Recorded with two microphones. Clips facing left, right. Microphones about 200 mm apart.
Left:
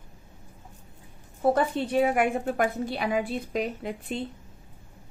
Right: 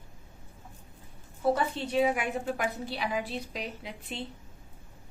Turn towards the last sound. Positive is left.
turn(degrees=50)  # may be behind; listen again after turning